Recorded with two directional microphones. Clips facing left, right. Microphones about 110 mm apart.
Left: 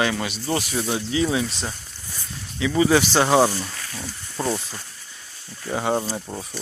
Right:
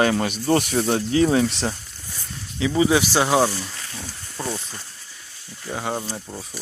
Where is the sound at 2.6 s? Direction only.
25° right (ahead or behind).